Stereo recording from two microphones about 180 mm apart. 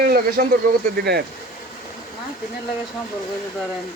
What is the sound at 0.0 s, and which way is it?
Speech, 55° right (ahead or behind).